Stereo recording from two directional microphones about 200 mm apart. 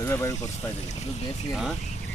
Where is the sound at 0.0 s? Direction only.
15° left (ahead or behind).